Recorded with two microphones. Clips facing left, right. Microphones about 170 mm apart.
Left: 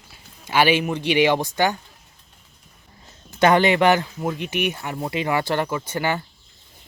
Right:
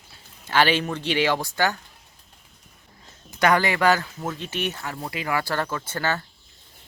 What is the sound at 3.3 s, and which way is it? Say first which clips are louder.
Speech: left 4 dB; 25° left (ahead or behind).